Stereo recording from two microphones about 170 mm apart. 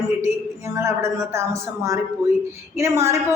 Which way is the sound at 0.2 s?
15° right (ahead or behind).